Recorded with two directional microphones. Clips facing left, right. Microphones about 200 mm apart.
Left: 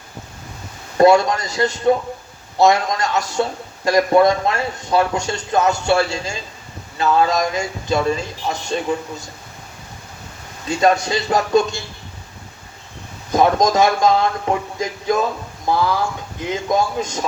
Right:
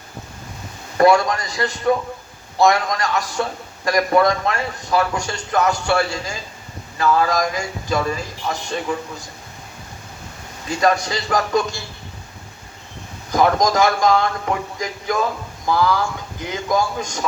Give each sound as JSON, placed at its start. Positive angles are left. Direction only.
{"t": 0.9, "sound": "speech", "side_deg": 25}
{"t": 10.7, "sound": "speech", "side_deg": 25}
{"t": 13.3, "sound": "speech", "side_deg": 25}